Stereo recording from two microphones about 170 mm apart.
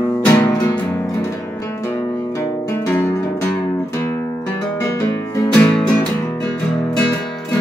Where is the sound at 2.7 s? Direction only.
15° left (ahead or behind).